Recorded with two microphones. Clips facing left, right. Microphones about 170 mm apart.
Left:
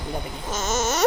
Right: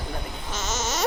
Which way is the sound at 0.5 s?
50° left (ahead or behind).